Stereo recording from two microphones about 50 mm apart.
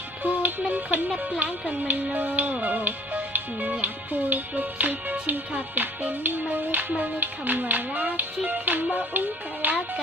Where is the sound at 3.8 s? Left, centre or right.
Right.